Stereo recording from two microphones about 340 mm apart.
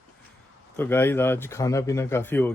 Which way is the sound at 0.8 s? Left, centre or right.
Centre.